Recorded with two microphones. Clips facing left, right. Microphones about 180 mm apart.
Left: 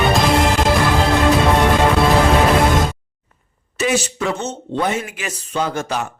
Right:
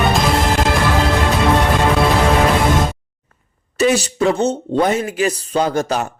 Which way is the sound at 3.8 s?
35° right (ahead or behind).